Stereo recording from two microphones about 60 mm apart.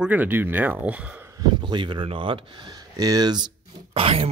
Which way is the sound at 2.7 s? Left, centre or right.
Right.